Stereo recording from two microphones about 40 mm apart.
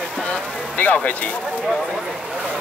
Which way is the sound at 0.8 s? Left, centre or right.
Left.